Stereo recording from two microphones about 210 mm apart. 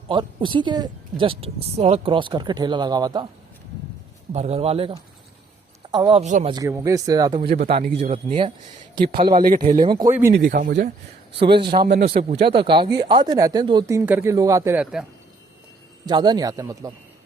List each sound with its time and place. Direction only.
0.1 s speech: 20° right (ahead or behind)
4.3 s speech: 30° right (ahead or behind)
6.2 s speech: 35° right (ahead or behind)
6.5 s speech: 15° right (ahead or behind)
7.9 s speech: 30° right (ahead or behind)
9.3 s speech: 40° right (ahead or behind)
9.8 s speech: 20° right (ahead or behind)
10.1 s speech: 10° right (ahead or behind)
10.3 s a man's voice: 45° right (ahead or behind)
11.6 s speech: 25° right (ahead or behind)
11.9 s a man's voice: 50° right (ahead or behind)
12.1 s speech: 25° right (ahead or behind); by 15.0 s 10° right (ahead or behind)
16.0 s speech: 20° right (ahead or behind)